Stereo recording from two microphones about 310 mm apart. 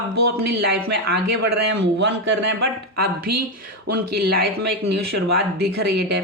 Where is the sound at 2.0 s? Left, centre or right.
Right.